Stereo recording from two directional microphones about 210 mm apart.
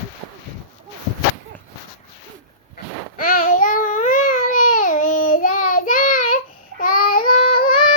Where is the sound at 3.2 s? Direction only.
40° left (ahead or behind).